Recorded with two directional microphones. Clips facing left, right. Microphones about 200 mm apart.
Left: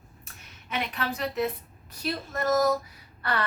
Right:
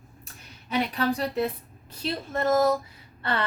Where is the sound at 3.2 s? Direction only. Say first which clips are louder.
Right 1 dB; 25° right (ahead or behind).